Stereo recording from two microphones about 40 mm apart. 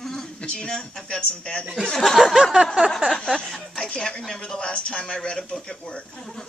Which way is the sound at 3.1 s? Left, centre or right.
Centre.